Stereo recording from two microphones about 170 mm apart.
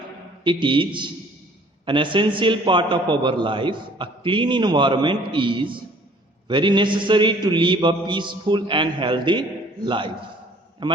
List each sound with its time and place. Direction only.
0.4 s a man's voice: 30° right (ahead or behind)